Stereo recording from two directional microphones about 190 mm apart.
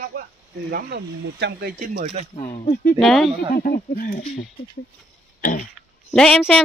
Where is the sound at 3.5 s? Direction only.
50° left (ahead or behind).